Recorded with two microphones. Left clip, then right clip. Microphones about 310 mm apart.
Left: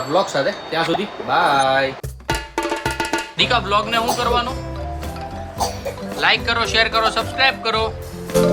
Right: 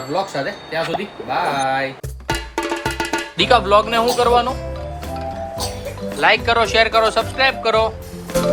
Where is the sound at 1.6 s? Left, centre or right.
Centre.